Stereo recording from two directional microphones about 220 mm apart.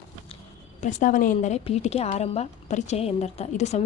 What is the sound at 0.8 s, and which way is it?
A woman's voice, 35° left (ahead or behind).